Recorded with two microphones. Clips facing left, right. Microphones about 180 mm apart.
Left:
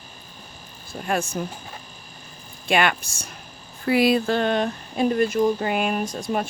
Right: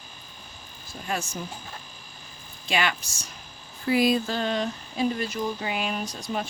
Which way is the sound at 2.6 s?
55° left (ahead or behind).